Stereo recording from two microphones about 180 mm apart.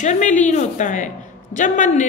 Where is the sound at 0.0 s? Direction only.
40° left (ahead or behind).